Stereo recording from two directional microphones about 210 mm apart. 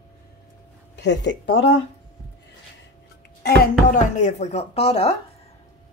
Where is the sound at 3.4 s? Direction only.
45° left (ahead or behind); by 5.1 s 30° left (ahead or behind).